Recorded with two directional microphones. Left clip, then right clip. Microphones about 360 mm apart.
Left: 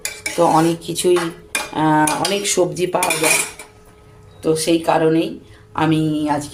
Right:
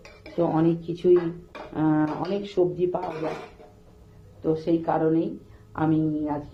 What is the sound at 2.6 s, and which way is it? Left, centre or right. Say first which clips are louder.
Cutlery: left 4 dB; right.